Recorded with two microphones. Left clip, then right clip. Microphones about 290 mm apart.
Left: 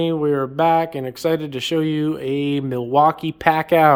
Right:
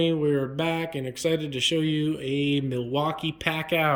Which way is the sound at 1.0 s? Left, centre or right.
Centre.